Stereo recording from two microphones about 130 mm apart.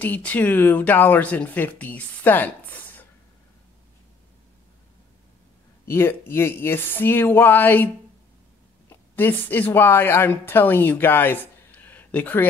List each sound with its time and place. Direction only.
0.0 s speech: 15° left (ahead or behind)
5.9 s speech: 20° left (ahead or behind)